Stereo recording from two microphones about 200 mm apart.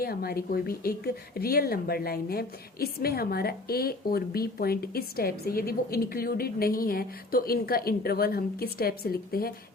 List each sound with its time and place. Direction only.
0.0 s speech: 50° left (ahead or behind)